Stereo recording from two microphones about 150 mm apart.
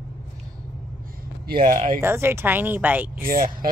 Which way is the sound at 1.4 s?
75° right (ahead or behind).